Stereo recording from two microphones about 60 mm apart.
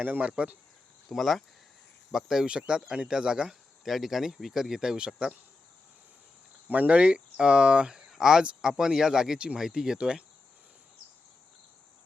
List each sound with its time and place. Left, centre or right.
0.0 s speech: right
1.1 s speech: centre
6.7 s speech: right